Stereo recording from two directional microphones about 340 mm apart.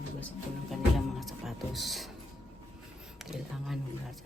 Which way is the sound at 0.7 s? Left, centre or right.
Centre.